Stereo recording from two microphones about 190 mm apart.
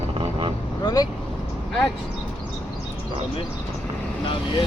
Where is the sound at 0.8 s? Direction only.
20° left (ahead or behind).